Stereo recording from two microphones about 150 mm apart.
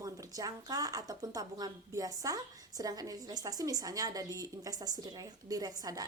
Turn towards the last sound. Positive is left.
turn(degrees=-25)  # may be behind; listen again after turning